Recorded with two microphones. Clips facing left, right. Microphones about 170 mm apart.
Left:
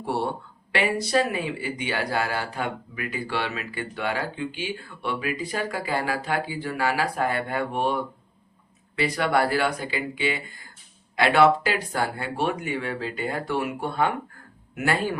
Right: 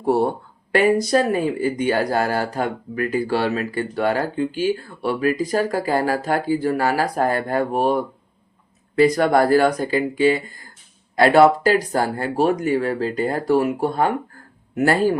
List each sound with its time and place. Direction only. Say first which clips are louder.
0.0 s speech: right 8 dB; 45° right (ahead or behind)